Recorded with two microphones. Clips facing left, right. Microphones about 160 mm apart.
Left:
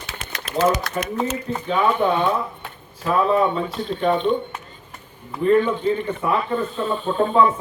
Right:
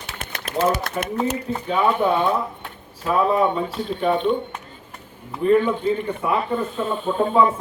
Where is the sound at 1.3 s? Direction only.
10° right (ahead or behind).